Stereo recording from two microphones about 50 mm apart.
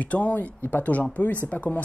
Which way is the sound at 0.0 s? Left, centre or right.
Left.